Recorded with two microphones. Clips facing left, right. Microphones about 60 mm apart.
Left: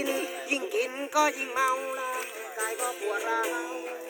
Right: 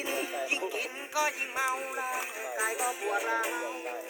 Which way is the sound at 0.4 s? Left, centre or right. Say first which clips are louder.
Left 4 dB; right.